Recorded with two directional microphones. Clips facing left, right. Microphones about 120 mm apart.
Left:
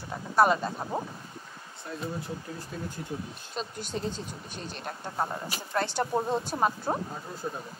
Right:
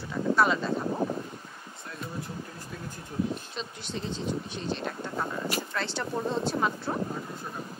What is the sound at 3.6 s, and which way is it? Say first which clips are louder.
Speech: left 2 dB; 45° left (ahead or behind).